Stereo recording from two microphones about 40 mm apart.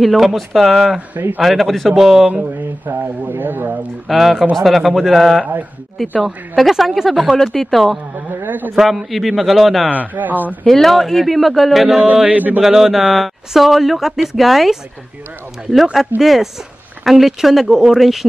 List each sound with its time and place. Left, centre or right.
0.0 s speech: centre
3.0 s speech: right
4.1 s speech: centre
8.5 s a man's voice: right
8.8 s speech: centre
9.8 s a man's voice: right
10.6 s speech: centre
12.3 s a man's voice: right
12.6 s speech: centre